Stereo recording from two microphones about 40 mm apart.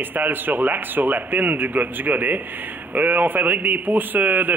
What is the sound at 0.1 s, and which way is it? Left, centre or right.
Speech, right.